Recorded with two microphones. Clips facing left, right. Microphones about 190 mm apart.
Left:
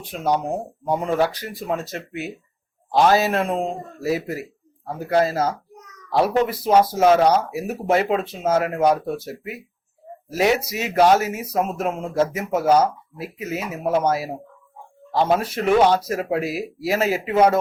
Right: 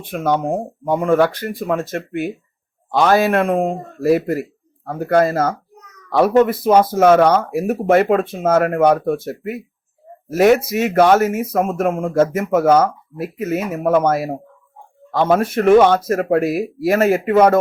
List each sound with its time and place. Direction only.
0.0 s a man's voice: 55° right (ahead or behind)